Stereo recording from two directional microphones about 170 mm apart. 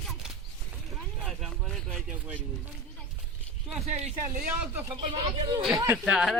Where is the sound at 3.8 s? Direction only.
40° right (ahead or behind).